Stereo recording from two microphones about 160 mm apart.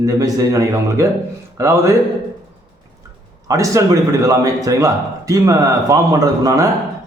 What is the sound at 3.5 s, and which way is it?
A man's voice, 20° right (ahead or behind).